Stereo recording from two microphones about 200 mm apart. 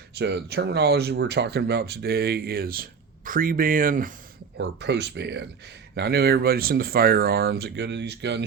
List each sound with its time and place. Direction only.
0.2 s speech: 55° right (ahead or behind)
4.5 s speech: 60° right (ahead or behind)